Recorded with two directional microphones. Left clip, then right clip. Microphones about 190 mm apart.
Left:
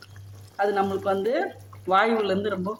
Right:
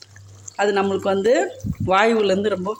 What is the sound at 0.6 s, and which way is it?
Speech, 30° right (ahead or behind).